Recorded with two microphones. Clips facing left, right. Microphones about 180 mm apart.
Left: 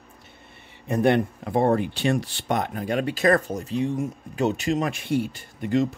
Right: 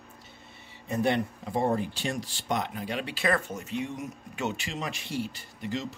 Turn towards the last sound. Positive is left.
turn(degrees=55)  # may be behind; listen again after turning